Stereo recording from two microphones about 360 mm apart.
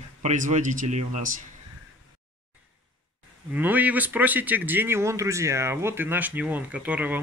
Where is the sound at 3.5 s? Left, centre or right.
Centre.